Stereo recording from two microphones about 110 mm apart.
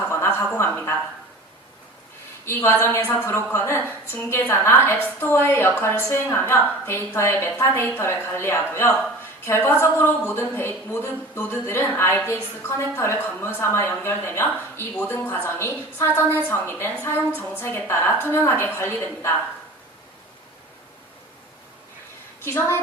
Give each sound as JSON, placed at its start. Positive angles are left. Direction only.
{"t": 0.1, "sound": "speech", "side_deg": 20}
{"t": 2.4, "sound": "a woman's voice", "side_deg": 20}
{"t": 22.4, "sound": "a woman's voice", "side_deg": 25}